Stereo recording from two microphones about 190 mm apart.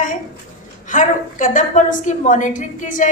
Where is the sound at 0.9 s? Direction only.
45° left (ahead or behind).